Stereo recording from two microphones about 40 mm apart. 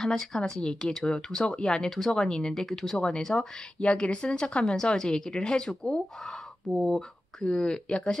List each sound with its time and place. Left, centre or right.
0.0 s speech: centre
3.8 s speech: left; by 7.4 s centre
7.4 s speech: left